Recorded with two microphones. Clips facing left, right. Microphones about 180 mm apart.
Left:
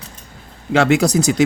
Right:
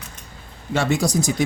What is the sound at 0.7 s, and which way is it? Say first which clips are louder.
Speech: left 6 dB; 80° left.